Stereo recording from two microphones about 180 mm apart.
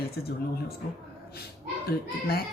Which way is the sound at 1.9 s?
60° left (ahead or behind).